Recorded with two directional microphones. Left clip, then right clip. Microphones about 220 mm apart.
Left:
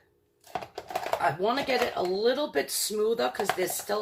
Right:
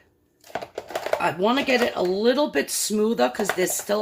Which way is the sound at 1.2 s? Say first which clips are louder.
Right 4 dB; 50° right (ahead or behind).